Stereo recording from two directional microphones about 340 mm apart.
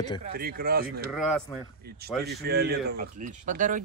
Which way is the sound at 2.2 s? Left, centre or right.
Right.